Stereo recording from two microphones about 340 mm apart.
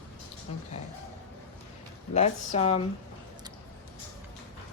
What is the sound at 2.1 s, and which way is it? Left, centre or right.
Speech, centre.